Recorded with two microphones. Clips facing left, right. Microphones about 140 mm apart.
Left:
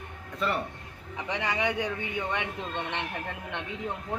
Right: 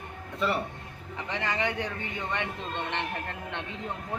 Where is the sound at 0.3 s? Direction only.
5° right (ahead or behind).